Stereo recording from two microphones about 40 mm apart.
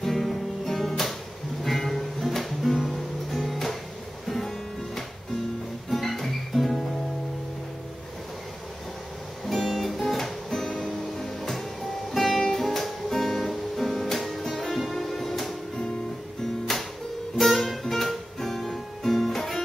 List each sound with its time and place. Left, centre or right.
0.0 s music: centre
9.5 s music: centre
16.7 s music: centre